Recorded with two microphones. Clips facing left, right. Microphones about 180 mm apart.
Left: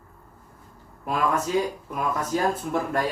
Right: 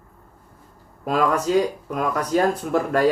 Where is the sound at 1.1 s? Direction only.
75° right (ahead or behind).